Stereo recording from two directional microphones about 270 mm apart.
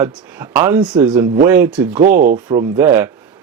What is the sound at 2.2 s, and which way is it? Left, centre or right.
Speech, right.